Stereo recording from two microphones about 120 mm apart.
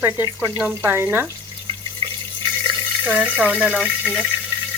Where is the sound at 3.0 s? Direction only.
10° right (ahead or behind).